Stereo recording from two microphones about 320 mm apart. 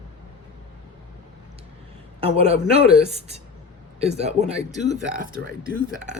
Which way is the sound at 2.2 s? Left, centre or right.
Centre.